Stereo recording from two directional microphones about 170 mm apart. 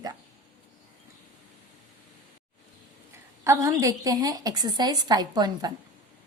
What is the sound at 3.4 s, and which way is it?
Speech, 20° right (ahead or behind).